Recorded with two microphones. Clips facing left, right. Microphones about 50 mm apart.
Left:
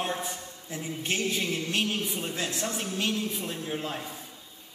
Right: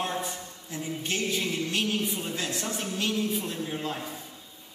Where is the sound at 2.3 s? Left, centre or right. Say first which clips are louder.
Even; centre.